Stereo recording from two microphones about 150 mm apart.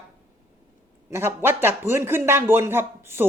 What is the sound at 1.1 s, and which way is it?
A woman's voice, 15° right (ahead or behind).